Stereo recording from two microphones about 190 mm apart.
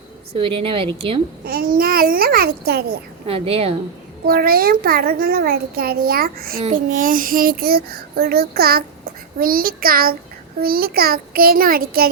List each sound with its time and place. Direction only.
0.3 s speech: 30° right (ahead or behind)
1.5 s a child's voice: 50° right (ahead or behind)
3.2 s a woman's voice: 30° right (ahead or behind)
4.3 s a child's voice: 50° right (ahead or behind)
6.6 s a child's voice: 40° right (ahead or behind)